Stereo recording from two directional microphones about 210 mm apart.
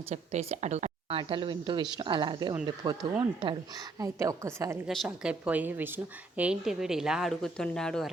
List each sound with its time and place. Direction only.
0.1 s a woman's voice: 30° right (ahead or behind); by 8.1 s centre (ahead or behind)